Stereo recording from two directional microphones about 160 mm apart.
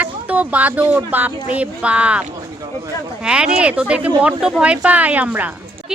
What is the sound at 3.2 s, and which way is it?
Speech, 5° right (ahead or behind).